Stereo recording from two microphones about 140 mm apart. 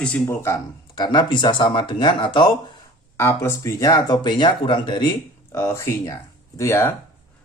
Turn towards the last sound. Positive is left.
turn(degrees=20)  # may be behind; listen again after turning